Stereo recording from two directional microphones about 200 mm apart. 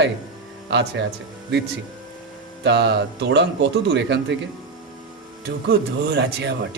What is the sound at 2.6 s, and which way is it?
Speech, 60° right (ahead or behind).